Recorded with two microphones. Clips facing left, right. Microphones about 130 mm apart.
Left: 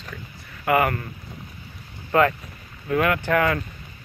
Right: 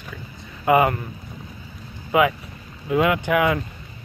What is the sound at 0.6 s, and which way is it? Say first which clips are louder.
Speech: right 3 dB; 20° right (ahead or behind).